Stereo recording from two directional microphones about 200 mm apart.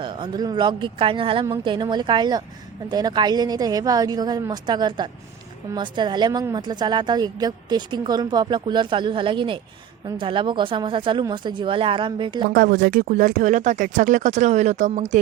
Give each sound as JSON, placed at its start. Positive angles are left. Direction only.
{"t": 0.0, "sound": "a woman's voice", "side_deg": -20}
{"t": 12.5, "sound": "speech", "side_deg": -45}